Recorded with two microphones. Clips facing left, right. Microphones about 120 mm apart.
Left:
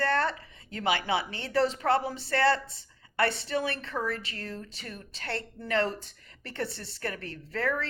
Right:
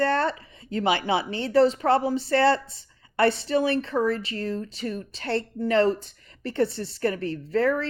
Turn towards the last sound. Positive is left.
turn(degrees=-25)  # may be behind; listen again after turning